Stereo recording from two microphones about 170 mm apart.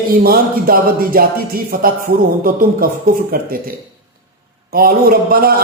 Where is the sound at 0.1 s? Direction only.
60° right (ahead or behind).